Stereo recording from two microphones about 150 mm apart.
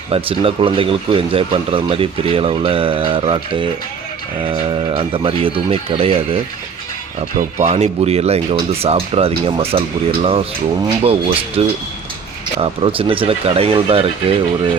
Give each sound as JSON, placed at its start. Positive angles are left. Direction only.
{"t": 0.1, "sound": "speech", "side_deg": -40}